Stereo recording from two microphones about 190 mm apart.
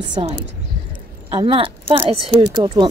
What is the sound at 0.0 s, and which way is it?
Speech, 25° right (ahead or behind).